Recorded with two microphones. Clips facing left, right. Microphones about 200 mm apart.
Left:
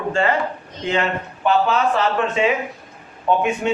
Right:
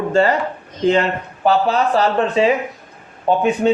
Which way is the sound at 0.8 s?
35° right (ahead or behind).